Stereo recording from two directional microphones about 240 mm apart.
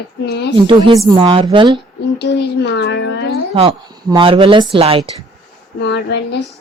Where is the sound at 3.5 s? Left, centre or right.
Right.